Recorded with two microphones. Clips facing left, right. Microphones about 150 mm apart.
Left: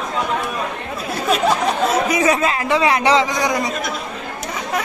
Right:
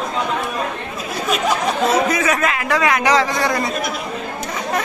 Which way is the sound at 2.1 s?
30° left (ahead or behind).